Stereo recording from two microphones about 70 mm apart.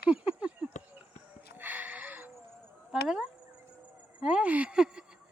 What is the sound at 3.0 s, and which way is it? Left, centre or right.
Speech, centre.